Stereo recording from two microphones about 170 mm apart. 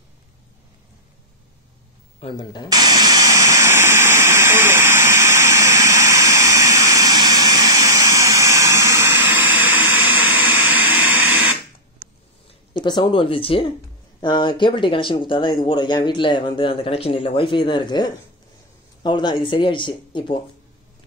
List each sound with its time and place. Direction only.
2.1 s speech: 30° left (ahead or behind)
2.7 s jet engine: 25° right (ahead or behind)
12.7 s speech: 25° left (ahead or behind)